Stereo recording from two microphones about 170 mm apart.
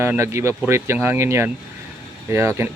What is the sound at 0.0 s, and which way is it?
Speech, 15° right (ahead or behind).